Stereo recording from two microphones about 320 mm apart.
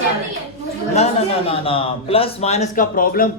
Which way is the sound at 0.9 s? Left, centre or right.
Centre.